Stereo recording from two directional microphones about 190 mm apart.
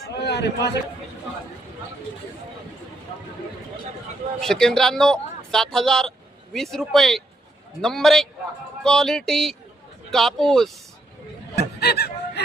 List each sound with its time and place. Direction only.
0.1 s a sound: 60° left (ahead or behind)
4.4 s a man's voice: 5° left (ahead or behind)
11.8 s speech: 55° left (ahead or behind)